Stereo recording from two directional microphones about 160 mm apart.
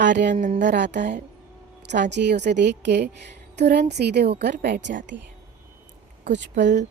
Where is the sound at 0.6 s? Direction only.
90° right.